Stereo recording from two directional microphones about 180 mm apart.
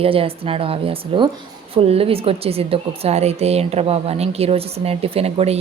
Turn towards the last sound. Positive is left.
turn(degrees=-35)  # may be behind; listen again after turning